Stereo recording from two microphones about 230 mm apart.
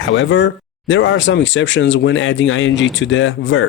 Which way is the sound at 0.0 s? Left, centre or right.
Left.